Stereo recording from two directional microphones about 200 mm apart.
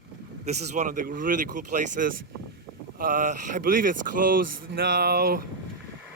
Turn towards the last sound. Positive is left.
turn(degrees=-50)  # may be behind; listen again after turning